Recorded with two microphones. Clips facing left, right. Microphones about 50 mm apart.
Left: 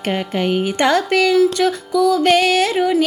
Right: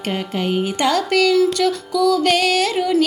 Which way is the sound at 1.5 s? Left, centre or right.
Left.